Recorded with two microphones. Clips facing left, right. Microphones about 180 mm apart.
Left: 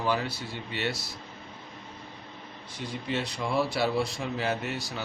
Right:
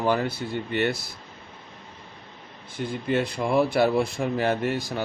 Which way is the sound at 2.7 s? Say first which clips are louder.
Right 7 dB; 55° right (ahead or behind).